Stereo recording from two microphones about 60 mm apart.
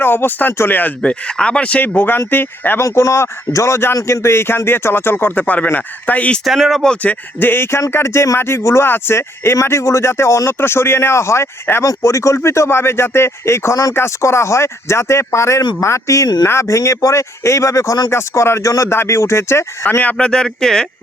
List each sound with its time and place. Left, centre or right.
0.0 s speech: left
1.0 s speech: centre; by 2.8 s left
2.8 s speech: left
6.4 s speech: centre
7.0 s speech: left
11.7 s speech: left
12.0 s speech: left
16.5 s speech: left
18.1 s speech: left
20.1 s speech: centre